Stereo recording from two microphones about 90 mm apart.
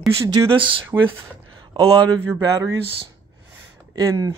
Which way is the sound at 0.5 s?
70° right (ahead or behind).